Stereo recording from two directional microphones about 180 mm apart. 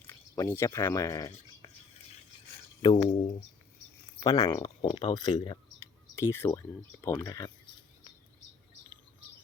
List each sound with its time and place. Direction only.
0.1 s speech: 15° left (ahead or behind)
2.8 s speech: 25° left (ahead or behind)
4.6 s speech: 30° left (ahead or behind)
6.1 s speech: 15° left (ahead or behind)